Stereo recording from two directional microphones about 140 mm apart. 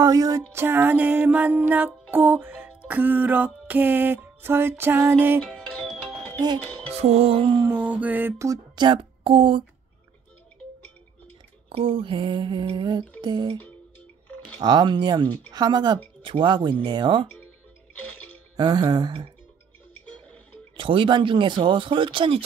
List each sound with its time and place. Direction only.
0.0 s music: 25° right (ahead or behind)
5.4 s music: 5° left (ahead or behind)
6.9 s music: 50° right (ahead or behind)
7.6 s music: 15° right (ahead or behind)
8.7 s speech: 35° right (ahead or behind)
11.7 s speech: 40° right (ahead or behind)
14.6 s speech: 30° right (ahead or behind)
17.9 s music: 10° left (ahead or behind)
18.6 s music: 30° right (ahead or behind)
20.7 s speech: 35° right (ahead or behind)